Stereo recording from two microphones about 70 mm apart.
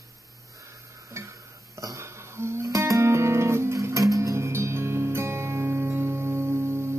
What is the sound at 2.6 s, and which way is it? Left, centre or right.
Music, right.